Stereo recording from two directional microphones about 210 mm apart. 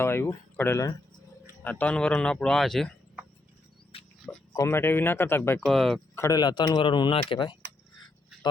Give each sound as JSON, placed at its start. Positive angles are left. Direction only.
{"t": 0.0, "sound": "speech", "side_deg": 10}
{"t": 3.9, "sound": "pig", "side_deg": 25}
{"t": 4.5, "sound": "speech", "side_deg": 10}
{"t": 6.1, "sound": "speech", "side_deg": 15}